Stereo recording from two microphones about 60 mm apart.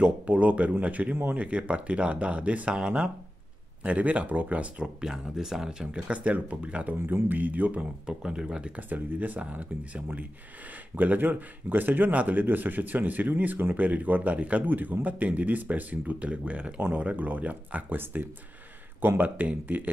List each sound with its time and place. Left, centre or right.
0.0 s a man's voice: right
5.0 s a man's voice: centre; by 7.8 s right
8.1 s speech: centre
8.8 s a man's voice: right